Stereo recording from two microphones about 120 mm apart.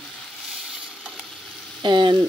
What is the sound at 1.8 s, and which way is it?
Speech, 40° right (ahead or behind).